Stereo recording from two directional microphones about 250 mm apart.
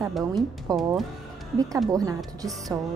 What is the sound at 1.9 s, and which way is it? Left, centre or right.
Speech, centre.